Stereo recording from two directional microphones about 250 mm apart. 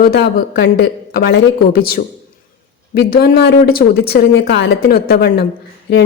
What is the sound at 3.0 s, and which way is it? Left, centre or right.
A woman's voice, left.